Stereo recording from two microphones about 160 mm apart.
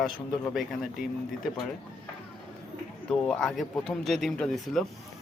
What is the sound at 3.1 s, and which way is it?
Speech, 5° left (ahead or behind).